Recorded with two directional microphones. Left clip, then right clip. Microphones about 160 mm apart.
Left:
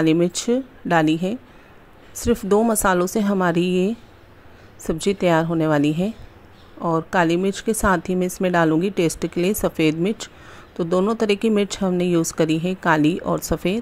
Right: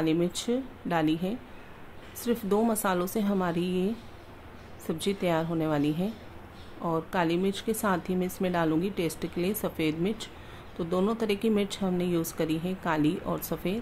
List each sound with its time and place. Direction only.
0.0 s speech: 50° left (ahead or behind)